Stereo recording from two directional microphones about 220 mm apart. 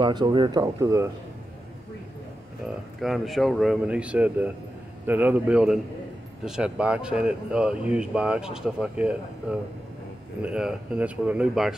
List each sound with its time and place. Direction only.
0.0 s speech: 20° right (ahead or behind)
3.0 s speech: centre (ahead or behind)